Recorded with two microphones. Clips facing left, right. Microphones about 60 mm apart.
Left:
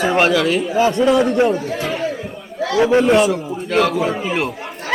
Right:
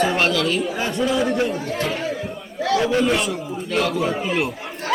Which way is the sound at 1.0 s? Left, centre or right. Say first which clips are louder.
Left 5 dB; centre.